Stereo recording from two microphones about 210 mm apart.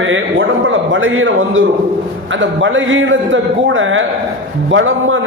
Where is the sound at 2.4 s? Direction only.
65° right (ahead or behind).